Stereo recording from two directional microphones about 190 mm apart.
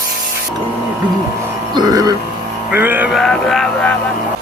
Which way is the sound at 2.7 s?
10° right (ahead or behind).